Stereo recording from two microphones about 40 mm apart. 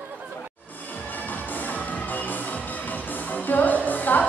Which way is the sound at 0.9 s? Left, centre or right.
Left.